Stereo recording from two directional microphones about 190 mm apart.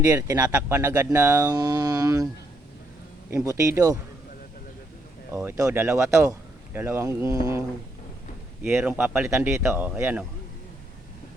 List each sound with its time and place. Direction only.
0.0 s speech: 15° right (ahead or behind)
3.3 s speech: 15° right (ahead or behind)
5.3 s speech: 15° right (ahead or behind)
8.6 s speech: 10° right (ahead or behind)